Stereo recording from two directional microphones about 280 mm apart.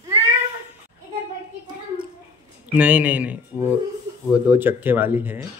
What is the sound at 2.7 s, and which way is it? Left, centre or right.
A man's voice, centre.